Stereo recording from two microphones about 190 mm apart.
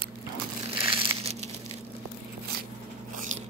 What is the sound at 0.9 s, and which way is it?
Crumpling, 30° right (ahead or behind).